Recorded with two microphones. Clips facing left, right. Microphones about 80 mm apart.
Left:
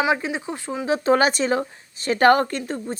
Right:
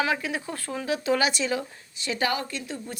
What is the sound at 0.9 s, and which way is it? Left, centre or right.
A woman's voice, left.